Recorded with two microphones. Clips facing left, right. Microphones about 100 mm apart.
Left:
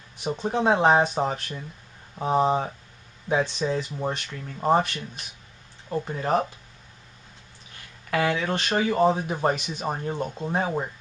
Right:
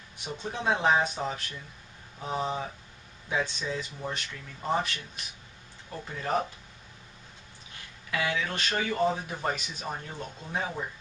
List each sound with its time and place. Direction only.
0.2 s speech: 40° left (ahead or behind)
5.9 s speech: 35° left (ahead or behind)
8.1 s speech: 45° left (ahead or behind)